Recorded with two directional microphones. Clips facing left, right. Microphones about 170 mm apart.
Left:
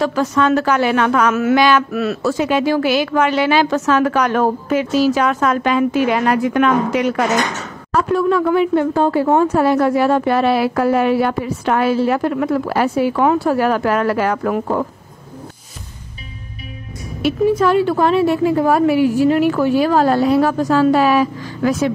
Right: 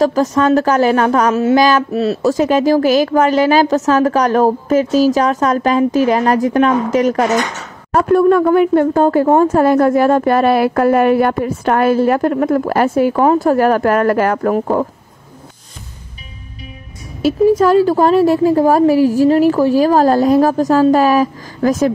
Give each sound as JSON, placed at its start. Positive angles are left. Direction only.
{"t": 0.0, "sound": "speech", "side_deg": -40}
{"t": 7.9, "sound": "speech", "side_deg": -50}
{"t": 17.2, "sound": "speech", "side_deg": -40}